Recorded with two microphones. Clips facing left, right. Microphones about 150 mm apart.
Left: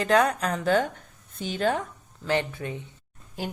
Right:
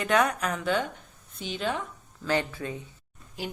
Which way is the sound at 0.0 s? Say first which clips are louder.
Left 3 dB; 35° left (ahead or behind).